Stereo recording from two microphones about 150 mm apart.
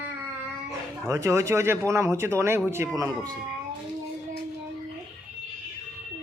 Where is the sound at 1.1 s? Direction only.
20° right (ahead or behind).